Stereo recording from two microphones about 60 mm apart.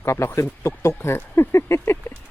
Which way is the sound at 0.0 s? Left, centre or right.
Left.